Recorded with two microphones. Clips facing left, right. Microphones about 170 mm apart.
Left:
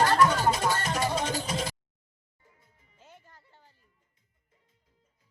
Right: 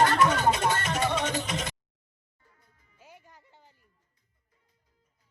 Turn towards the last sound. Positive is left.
turn(degrees=-15)  # may be behind; listen again after turning